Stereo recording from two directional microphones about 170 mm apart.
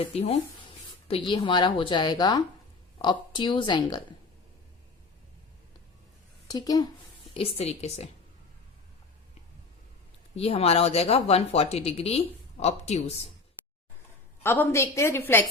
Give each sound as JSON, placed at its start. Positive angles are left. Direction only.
{"t": 0.1, "sound": "a woman's voice", "side_deg": 35}
{"t": 6.5, "sound": "a woman's voice", "side_deg": 20}
{"t": 7.3, "sound": "speech", "side_deg": 35}
{"t": 10.3, "sound": "speech", "side_deg": 35}
{"t": 14.4, "sound": "a woman's voice", "side_deg": 10}